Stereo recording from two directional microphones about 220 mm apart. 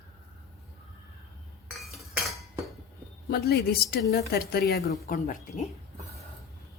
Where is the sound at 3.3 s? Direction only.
45° left (ahead or behind).